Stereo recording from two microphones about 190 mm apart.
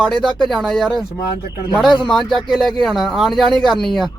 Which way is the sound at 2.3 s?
Centre (ahead or behind).